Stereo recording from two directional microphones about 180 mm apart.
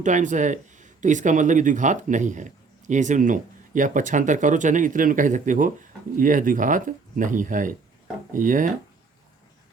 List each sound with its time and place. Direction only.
0.0 s speech: 45° right (ahead or behind)